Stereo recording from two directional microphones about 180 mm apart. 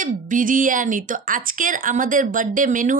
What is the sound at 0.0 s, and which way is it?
A woman's voice, 45° right (ahead or behind).